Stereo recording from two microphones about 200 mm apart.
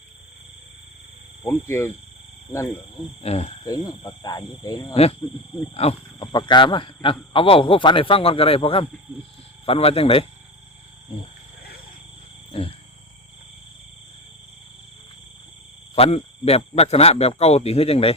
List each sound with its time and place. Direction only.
1.5 s speech: 10° left (ahead or behind)
3.2 s speech: 30° left (ahead or behind)
3.6 s speech: 20° left (ahead or behind)
5.7 s speech: 30° left (ahead or behind)
12.5 s wild animals: 30° left (ahead or behind)
16.0 s speech: 30° left (ahead or behind)